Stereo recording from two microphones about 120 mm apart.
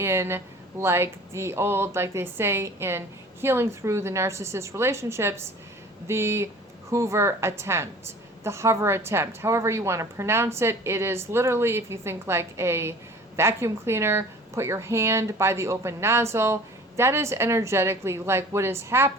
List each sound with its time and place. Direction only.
0.0 s a woman's voice: 20° right (ahead or behind)